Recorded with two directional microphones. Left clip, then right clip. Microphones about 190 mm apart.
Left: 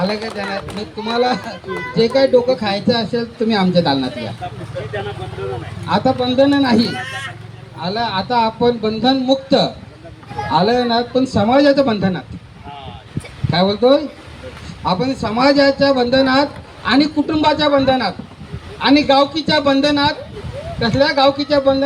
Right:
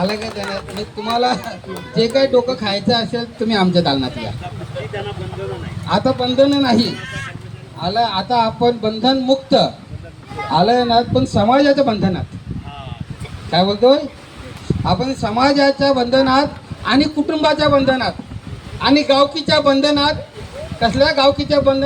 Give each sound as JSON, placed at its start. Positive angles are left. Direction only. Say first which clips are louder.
{"t": 0.0, "sound": "a man's voice", "louder": "even", "side_deg": -50}
{"t": 5.9, "sound": "a man's voice", "louder": "left 1 dB", "side_deg": -50}
{"t": 13.5, "sound": "a man's voice", "louder": "even", "side_deg": -45}